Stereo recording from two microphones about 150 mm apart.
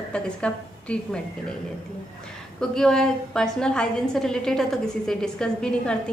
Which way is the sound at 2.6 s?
5° left (ahead or behind).